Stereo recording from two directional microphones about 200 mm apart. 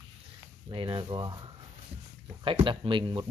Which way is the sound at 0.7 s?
25° right (ahead or behind).